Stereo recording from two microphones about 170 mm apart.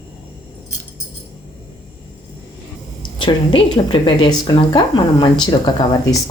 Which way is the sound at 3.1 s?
30° left (ahead or behind).